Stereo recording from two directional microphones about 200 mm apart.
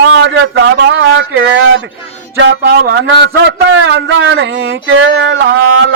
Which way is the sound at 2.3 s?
60° right (ahead or behind).